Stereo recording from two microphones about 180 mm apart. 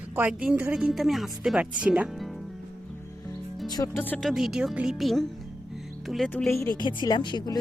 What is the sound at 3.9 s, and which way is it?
Speech, 10° left (ahead or behind).